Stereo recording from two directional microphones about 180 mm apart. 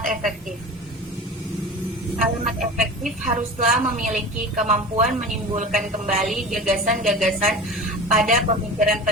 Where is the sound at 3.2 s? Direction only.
45° right (ahead or behind).